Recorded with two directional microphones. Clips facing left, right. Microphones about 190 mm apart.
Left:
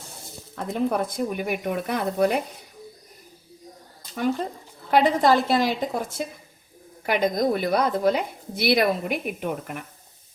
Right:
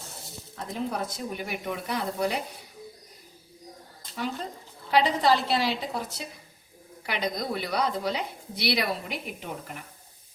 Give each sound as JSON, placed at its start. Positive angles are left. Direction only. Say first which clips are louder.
{"t": 0.5, "sound": "speech", "louder": "left 7 dB", "side_deg": 60}
{"t": 4.9, "sound": "a woman's voice", "louder": "left 4 dB", "side_deg": 50}